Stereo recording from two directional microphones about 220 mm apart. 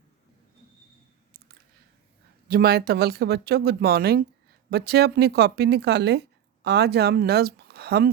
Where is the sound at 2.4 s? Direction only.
45° right (ahead or behind).